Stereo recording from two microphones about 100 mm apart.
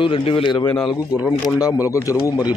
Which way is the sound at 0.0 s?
60° left (ahead or behind).